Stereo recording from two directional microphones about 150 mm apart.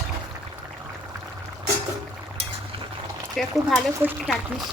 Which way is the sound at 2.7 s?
35° right (ahead or behind).